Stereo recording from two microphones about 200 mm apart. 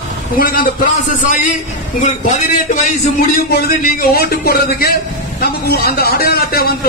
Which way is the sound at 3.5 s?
50° left (ahead or behind).